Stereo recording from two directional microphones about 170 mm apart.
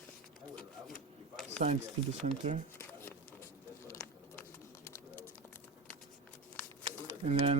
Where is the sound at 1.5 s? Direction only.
40° right (ahead or behind).